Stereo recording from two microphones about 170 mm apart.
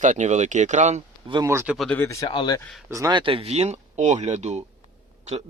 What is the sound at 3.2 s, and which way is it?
Speech, 35° right (ahead or behind).